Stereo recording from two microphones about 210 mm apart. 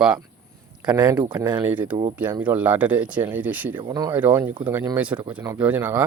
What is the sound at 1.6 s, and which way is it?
Speech, 10° right (ahead or behind).